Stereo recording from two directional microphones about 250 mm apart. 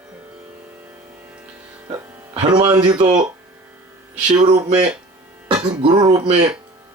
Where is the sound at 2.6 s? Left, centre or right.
Centre.